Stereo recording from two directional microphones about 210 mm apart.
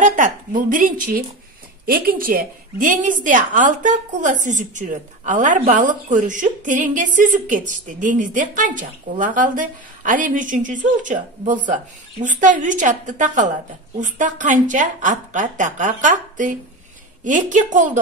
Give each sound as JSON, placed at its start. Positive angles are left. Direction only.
{"t": 0.0, "sound": "a woman's voice", "side_deg": -40}